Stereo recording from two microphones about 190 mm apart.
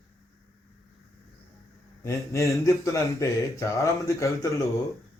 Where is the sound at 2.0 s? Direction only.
15° left (ahead or behind).